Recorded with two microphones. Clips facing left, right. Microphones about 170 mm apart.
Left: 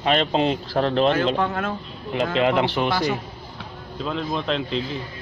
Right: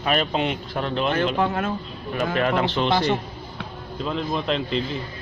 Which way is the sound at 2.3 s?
20° left (ahead or behind).